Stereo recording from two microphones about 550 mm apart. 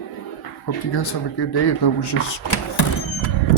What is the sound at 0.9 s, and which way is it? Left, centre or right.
Speech, left.